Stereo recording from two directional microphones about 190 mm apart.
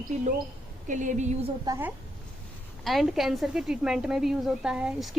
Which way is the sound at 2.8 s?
Centre (ahead or behind).